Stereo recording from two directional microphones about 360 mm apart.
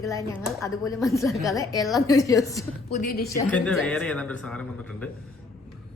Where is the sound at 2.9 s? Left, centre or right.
Left.